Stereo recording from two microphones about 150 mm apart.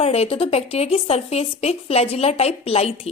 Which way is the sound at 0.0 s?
40° left (ahead or behind).